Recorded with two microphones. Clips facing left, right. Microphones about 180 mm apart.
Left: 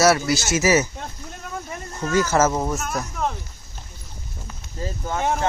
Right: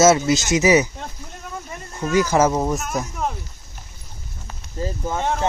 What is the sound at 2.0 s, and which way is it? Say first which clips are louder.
Speech: right 2 dB; 15° right (ahead or behind).